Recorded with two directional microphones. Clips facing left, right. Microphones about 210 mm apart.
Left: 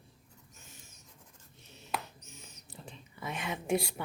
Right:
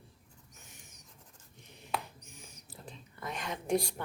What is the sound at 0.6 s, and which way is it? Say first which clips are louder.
Owl: even; 15° right (ahead or behind).